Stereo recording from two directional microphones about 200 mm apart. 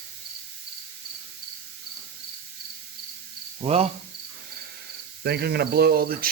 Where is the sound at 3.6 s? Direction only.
30° right (ahead or behind).